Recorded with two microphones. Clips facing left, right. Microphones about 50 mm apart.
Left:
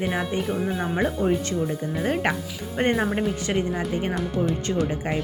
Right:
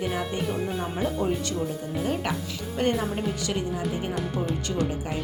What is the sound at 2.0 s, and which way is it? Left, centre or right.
Speech, left.